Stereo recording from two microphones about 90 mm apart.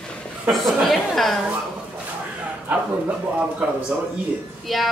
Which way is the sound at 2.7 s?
15° right (ahead or behind).